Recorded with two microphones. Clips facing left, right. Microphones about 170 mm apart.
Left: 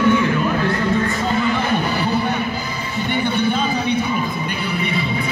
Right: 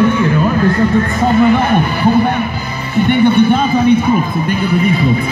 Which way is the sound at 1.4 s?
55° right (ahead or behind).